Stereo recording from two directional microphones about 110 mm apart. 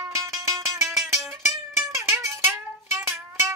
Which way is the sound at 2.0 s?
20° right (ahead or behind).